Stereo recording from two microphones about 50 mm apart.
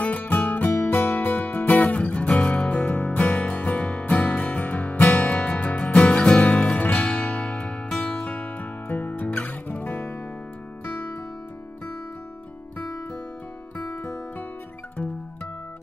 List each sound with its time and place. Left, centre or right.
0.0 s music: left; by 8.2 s centre
8.2 s music: left
13.9 s music: left